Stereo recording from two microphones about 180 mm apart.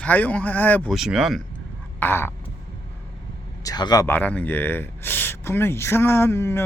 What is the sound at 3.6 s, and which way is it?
Speech, 20° left (ahead or behind).